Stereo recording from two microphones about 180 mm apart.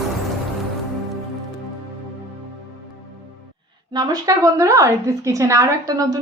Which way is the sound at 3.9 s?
20° right (ahead or behind).